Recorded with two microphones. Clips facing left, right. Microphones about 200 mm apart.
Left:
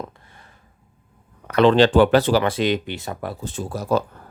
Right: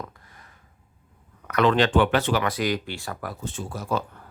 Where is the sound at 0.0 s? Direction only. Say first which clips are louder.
Left 4 dB; 30° left (ahead or behind).